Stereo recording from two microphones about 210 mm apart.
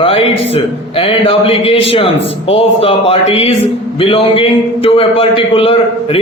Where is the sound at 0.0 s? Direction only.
25° left (ahead or behind).